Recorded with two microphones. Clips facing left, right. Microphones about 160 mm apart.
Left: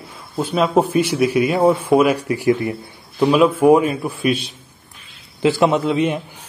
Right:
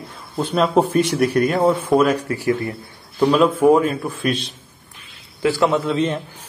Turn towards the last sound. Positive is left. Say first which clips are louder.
# left 2 dB
turn(degrees=10)  # may be behind; listen again after turning